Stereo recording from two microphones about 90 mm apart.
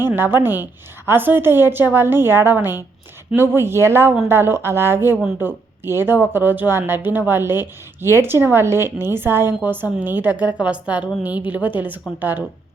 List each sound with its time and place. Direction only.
0.0 s a woman's voice: 25° right (ahead or behind)